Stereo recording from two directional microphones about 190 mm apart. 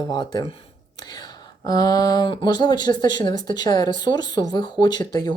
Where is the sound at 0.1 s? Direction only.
20° left (ahead or behind).